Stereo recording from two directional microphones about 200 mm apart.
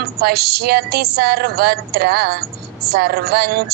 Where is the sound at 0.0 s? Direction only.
50° right (ahead or behind).